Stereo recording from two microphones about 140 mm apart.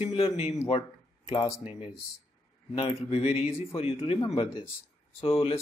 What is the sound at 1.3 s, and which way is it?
Speech, 20° left (ahead or behind).